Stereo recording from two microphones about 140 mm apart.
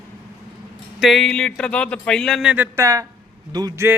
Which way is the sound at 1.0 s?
Centre (ahead or behind).